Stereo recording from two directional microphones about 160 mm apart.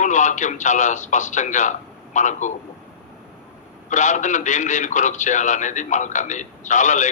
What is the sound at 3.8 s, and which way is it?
A man's voice, 50° left (ahead or behind).